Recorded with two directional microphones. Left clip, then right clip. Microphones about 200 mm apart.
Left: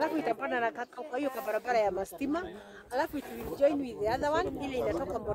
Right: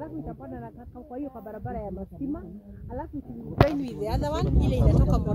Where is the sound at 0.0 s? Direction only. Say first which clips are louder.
Left 8 dB; 50° left (ahead or behind).